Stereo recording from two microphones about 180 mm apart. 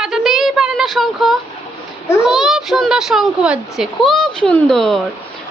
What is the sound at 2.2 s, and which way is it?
A child's voice, centre (ahead or behind).